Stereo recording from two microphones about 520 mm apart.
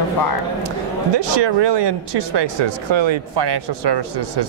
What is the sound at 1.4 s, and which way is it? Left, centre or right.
Speech, right.